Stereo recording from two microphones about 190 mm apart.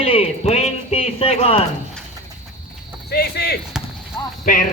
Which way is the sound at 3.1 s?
60° left (ahead or behind).